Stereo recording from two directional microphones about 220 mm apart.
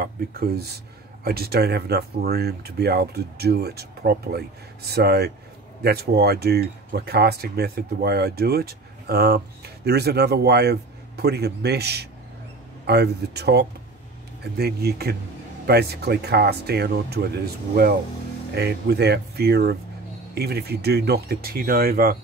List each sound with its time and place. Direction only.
0.0 s speech: 45° right (ahead or behind)